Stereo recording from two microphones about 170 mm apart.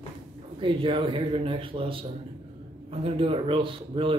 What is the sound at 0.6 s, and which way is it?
A man's voice, 30° right (ahead or behind).